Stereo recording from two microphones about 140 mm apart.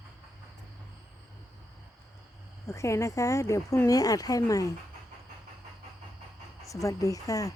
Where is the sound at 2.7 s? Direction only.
20° left (ahead or behind).